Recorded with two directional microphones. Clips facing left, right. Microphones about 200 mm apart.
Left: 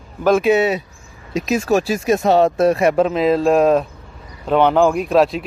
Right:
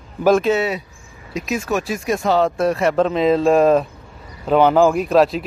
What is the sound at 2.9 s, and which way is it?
Speech, 5° left (ahead or behind).